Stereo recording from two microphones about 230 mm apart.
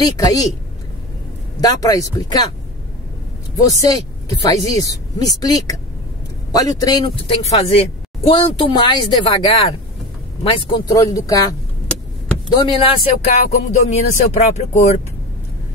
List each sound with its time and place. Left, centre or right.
0.0 s speech: centre
1.6 s speech: centre
3.8 s speech: centre